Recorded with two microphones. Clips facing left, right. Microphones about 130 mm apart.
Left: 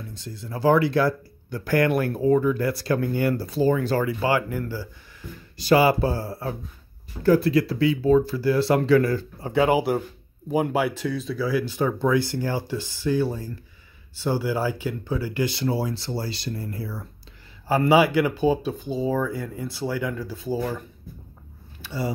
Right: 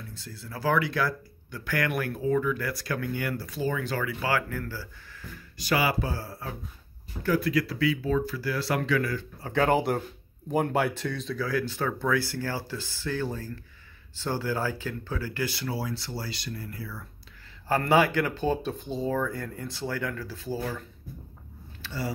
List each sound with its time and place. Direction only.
0.1 s speech: 20° left (ahead or behind)
5.6 s speech: 30° left (ahead or behind)
9.4 s speech: 10° left (ahead or behind); by 17.1 s 30° left (ahead or behind)
17.6 s speech: 10° left (ahead or behind)
21.8 s speech: 15° left (ahead or behind)